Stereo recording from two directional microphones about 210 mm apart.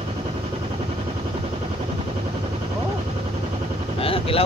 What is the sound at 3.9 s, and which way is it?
Vehicle, 25° left (ahead or behind).